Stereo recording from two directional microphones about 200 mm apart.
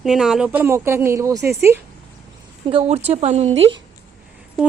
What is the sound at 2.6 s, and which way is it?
Speech, 30° right (ahead or behind).